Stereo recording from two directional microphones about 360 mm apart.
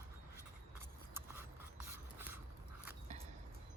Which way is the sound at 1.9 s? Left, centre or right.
Centre.